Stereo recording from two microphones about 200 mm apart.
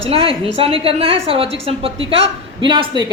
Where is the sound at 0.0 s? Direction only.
30° right (ahead or behind).